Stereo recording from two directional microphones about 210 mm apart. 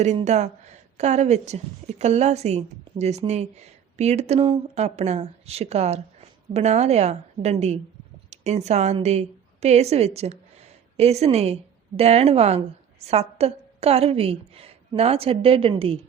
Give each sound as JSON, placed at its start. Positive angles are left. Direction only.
{"t": 0.0, "sound": "a woman's voice", "side_deg": -30}